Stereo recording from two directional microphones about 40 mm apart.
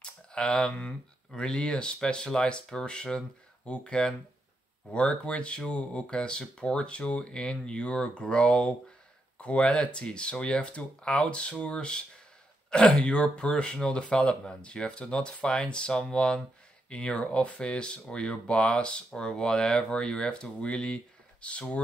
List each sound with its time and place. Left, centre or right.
0.0 s speech: left
12.6 s a sound: left
12.9 s speech: left